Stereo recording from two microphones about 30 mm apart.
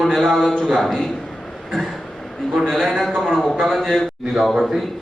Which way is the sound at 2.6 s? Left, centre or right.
Centre.